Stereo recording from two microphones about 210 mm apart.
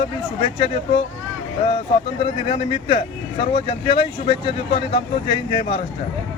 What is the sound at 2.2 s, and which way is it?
Speech, 25° left (ahead or behind).